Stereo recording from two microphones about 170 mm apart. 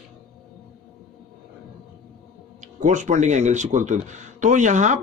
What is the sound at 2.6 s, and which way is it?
A man's voice, 45° right (ahead or behind).